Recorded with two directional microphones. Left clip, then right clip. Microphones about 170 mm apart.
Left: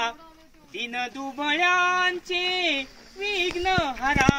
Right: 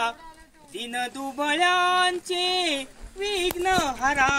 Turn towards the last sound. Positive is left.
turn(degrees=15)  # may be behind; listen again after turning